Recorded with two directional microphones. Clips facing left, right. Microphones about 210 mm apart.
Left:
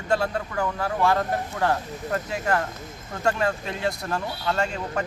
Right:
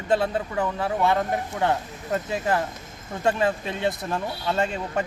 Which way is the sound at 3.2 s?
20° right (ahead or behind).